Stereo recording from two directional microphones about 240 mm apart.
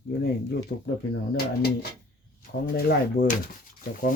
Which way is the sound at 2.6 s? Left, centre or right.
Left.